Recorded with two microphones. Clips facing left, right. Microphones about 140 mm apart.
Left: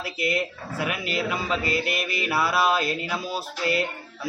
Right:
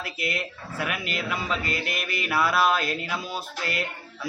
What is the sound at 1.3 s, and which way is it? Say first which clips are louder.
Speech: left 1 dB; 10° left (ahead or behind).